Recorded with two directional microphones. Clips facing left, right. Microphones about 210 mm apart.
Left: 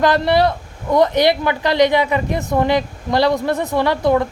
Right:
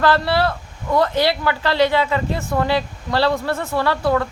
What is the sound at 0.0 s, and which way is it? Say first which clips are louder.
Speech: left 3 dB; 15° left (ahead or behind).